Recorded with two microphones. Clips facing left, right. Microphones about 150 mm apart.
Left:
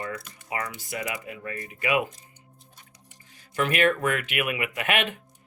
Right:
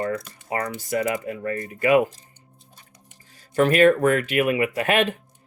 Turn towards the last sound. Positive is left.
turn(degrees=-35)  # may be behind; listen again after turning